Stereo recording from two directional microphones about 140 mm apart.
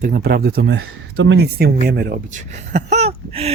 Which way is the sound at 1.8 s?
75° right (ahead or behind).